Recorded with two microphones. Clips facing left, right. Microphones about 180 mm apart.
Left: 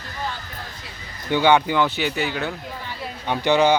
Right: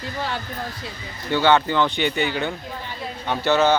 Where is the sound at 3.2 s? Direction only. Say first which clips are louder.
Left 1 dB; 15° left (ahead or behind).